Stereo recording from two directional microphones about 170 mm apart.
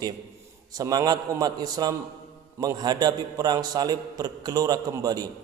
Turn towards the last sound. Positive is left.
turn(degrees=-20)  # may be behind; listen again after turning